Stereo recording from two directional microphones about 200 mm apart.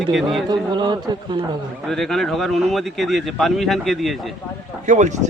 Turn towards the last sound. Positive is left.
turn(degrees=-35)  # may be behind; listen again after turning